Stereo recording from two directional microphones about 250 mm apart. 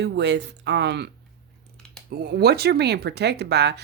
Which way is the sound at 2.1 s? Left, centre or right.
Right.